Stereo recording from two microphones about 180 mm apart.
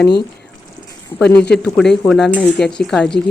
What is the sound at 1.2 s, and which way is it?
Speech, 5° left (ahead or behind).